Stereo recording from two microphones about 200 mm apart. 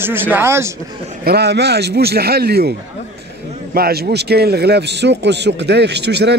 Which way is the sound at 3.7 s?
50° right (ahead or behind).